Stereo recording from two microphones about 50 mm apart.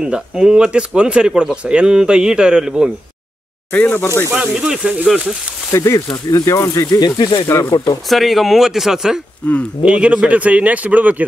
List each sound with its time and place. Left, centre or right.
0.0 s a man's voice: centre
3.9 s speech: left
4.4 s a man's voice: centre
5.7 s speech: left
8.1 s speech: centre
9.4 s speech: left
9.8 s speech: right